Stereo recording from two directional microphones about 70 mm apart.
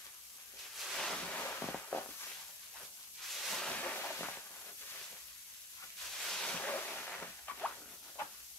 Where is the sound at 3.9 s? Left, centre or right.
Left.